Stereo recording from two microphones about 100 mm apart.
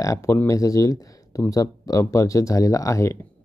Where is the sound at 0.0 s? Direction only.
30° left (ahead or behind).